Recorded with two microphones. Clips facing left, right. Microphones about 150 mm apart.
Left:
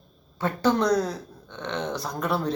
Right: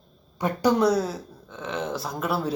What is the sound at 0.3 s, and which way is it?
Speech, 10° right (ahead or behind).